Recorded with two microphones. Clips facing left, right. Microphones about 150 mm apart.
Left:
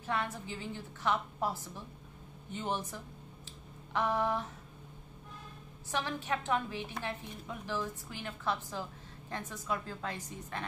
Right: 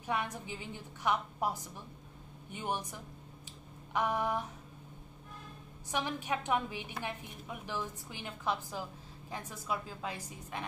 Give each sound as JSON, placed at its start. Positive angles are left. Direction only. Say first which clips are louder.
{"t": 0.0, "sound": "a woman's voice", "louder": "even", "side_deg": -15}
{"t": 5.9, "sound": "a woman's voice", "louder": "even", "side_deg": -15}